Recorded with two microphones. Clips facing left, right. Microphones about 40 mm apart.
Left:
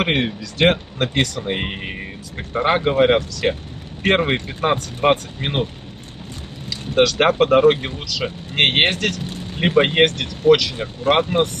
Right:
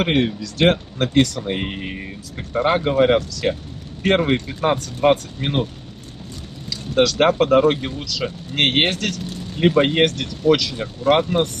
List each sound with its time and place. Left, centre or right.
0.0 s speech: left
1.5 s speech: left
6.7 s vehicle: centre
7.3 s speech: left